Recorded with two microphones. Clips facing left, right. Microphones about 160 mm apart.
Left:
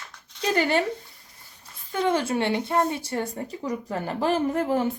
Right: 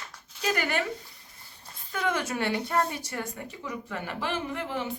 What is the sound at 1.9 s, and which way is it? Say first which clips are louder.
A woman's voice: left 6 dB; 30° left (ahead or behind).